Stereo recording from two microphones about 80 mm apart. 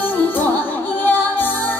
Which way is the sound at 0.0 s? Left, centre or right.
Left.